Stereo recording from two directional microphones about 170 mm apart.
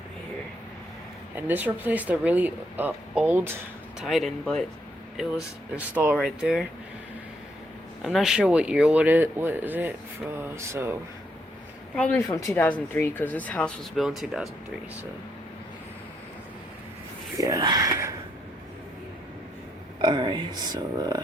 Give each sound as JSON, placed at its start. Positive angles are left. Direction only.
{"t": 1.4, "sound": "a woman's voice", "side_deg": -10}
{"t": 4.0, "sound": "a woman's voice", "side_deg": 0}
{"t": 8.0, "sound": "a woman's voice", "side_deg": 0}
{"t": 11.9, "sound": "speech", "side_deg": 10}
{"t": 17.4, "sound": "speech", "side_deg": -25}
{"t": 20.0, "sound": "speech", "side_deg": -25}